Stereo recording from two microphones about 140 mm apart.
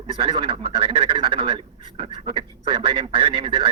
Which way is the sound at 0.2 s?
40° right (ahead or behind).